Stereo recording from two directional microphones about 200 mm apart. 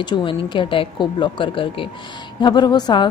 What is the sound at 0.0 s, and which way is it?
A woman's voice, 25° left (ahead or behind).